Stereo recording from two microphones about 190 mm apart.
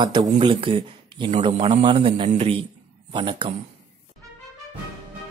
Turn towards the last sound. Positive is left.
turn(degrees=-25)  # may be behind; listen again after turning